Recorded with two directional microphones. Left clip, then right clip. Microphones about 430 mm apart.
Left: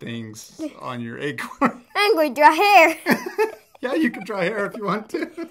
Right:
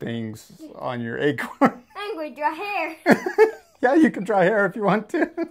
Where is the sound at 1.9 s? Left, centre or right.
Left.